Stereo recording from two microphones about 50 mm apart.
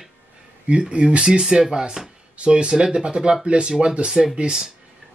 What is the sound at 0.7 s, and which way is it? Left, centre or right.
Speech, right.